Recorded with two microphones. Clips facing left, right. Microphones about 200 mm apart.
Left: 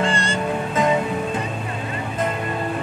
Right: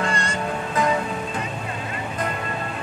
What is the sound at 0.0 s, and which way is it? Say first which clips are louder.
Music: left 3 dB; 30° left (ahead or behind).